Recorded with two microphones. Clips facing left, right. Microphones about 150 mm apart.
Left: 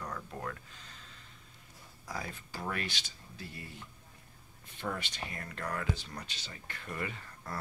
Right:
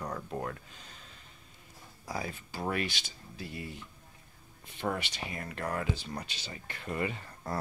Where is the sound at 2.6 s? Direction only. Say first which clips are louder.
Right 5 dB; 10° right (ahead or behind).